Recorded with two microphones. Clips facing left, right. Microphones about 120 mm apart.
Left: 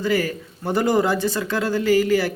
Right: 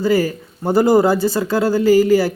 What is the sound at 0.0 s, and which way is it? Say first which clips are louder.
Speech: right 5 dB; 35° right (ahead or behind).